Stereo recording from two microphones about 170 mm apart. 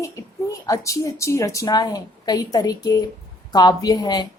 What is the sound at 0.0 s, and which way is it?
Speech, 20° left (ahead or behind).